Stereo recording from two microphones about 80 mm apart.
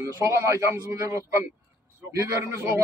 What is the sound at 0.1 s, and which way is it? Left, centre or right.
A man's voice, right.